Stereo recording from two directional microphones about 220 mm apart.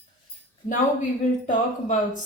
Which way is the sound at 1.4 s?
35° left (ahead or behind).